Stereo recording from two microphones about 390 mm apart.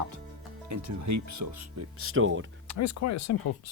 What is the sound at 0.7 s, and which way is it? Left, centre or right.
Speech, right.